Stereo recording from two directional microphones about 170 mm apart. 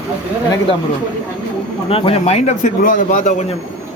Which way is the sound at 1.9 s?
35° left (ahead or behind).